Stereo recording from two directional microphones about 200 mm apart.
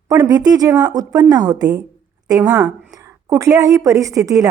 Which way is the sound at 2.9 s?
15° right (ahead or behind).